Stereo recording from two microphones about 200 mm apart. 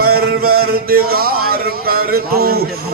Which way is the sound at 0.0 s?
50° right (ahead or behind).